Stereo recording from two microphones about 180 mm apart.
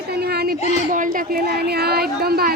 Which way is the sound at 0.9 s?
45° right (ahead or behind).